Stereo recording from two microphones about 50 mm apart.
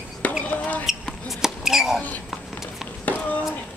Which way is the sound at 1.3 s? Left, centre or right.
Centre.